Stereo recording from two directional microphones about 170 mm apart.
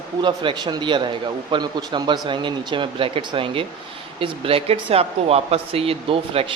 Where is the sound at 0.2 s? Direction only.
25° right (ahead or behind).